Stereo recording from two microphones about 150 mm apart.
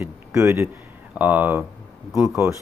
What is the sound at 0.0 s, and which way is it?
Speech, 20° right (ahead or behind).